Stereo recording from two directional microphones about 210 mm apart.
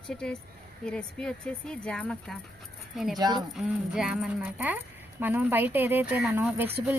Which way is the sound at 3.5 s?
5° right (ahead or behind).